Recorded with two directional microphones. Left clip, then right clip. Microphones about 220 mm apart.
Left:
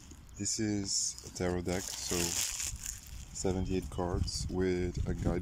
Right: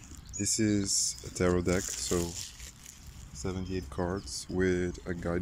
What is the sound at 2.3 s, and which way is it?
Crumpling, 55° left (ahead or behind).